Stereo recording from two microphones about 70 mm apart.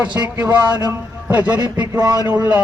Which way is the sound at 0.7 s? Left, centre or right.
Right.